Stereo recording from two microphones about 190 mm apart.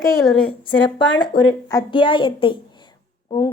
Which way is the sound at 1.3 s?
55° left (ahead or behind).